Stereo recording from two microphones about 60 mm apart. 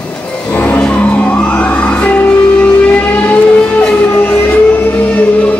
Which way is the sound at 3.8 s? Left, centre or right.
Centre.